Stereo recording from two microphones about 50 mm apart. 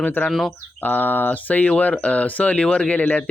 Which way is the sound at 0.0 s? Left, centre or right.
Left.